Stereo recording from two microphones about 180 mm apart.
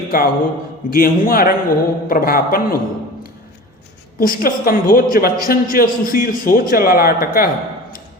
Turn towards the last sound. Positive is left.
turn(degrees=55)  # may be behind; listen again after turning